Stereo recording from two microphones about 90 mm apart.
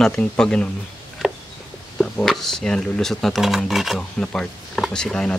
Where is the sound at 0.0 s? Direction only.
10° left (ahead or behind).